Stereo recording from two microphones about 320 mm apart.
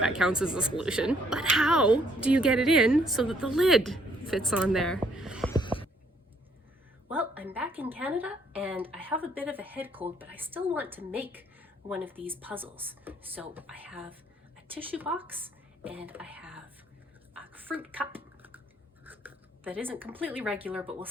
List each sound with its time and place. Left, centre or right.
0.0 s speech: centre
5.5 s a sound: centre
7.1 s a woman's voice: centre
16.0 s whispering: centre
17.3 s a sound: centre
19.0 s writing: centre